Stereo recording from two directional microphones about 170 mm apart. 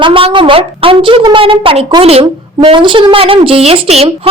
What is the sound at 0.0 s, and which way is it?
A woman's voice, 30° right (ahead or behind).